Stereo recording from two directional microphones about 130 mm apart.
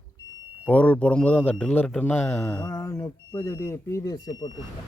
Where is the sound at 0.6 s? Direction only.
10° left (ahead or behind); by 4.5 s 30° left (ahead or behind).